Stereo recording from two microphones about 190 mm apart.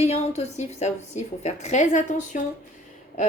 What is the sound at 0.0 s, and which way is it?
A woman's voice, 35° left (ahead or behind).